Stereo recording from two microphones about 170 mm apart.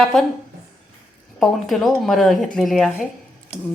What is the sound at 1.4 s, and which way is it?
A woman's voice, centre (ahead or behind).